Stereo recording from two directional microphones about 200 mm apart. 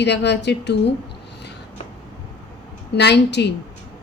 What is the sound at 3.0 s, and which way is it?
Speech, 60° left (ahead or behind).